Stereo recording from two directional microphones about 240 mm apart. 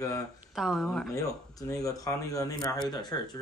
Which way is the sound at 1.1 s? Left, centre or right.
Centre.